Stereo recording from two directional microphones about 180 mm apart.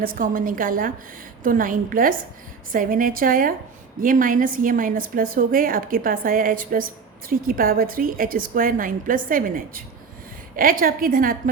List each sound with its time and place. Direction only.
0.0 s a woman's voice: 50° right (ahead or behind)